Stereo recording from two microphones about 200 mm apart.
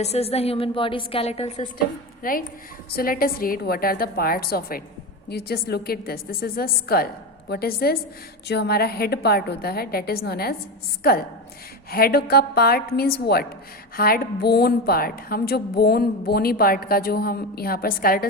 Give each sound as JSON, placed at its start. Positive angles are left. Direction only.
{"t": 0.0, "sound": "a woman's voice", "side_deg": 30}
{"t": 2.2, "sound": "a woman's voice", "side_deg": 45}
{"t": 11.9, "sound": "a woman's voice", "side_deg": 50}